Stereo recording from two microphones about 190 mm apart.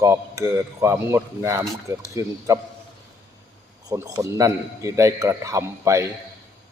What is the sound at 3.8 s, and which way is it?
A man's voice, 15° right (ahead or behind).